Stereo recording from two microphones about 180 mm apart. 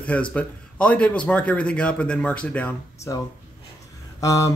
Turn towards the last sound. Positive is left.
turn(degrees=15)  # may be behind; listen again after turning